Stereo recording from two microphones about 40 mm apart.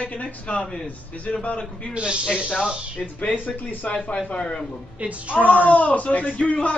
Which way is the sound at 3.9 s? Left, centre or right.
Left.